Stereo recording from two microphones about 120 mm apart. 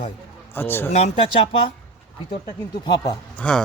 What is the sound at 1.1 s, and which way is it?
Speech, 45° left (ahead or behind).